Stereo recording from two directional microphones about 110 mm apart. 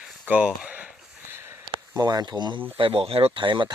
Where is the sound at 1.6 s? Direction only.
40° right (ahead or behind).